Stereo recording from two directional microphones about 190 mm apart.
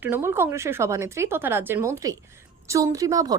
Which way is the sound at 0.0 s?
10° right (ahead or behind).